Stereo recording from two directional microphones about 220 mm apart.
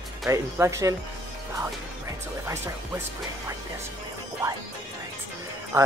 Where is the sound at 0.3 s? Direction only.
15° right (ahead or behind).